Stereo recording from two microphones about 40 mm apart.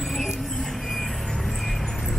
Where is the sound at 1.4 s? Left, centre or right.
Centre.